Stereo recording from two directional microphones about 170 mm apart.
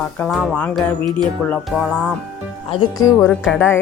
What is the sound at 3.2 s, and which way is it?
Speech, 10° left (ahead or behind).